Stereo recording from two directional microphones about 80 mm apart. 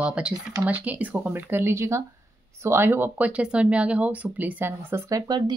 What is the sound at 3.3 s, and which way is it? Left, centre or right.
Speech, centre.